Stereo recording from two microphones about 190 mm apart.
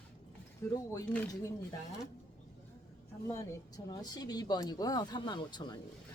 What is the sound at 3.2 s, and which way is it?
Speech, 15° left (ahead or behind).